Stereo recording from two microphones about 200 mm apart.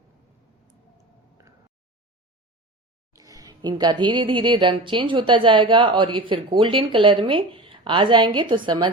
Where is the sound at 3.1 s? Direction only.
15° right (ahead or behind).